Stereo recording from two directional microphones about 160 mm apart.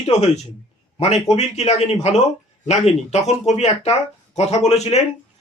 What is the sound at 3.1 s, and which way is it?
A man's voice, 45° left (ahead or behind).